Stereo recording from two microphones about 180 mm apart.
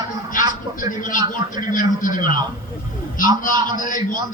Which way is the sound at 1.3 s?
45° left (ahead or behind).